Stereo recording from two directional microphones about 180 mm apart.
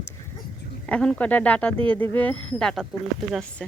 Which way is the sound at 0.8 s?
5° left (ahead or behind).